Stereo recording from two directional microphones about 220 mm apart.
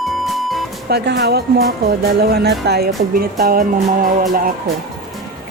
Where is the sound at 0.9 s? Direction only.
50° right (ahead or behind).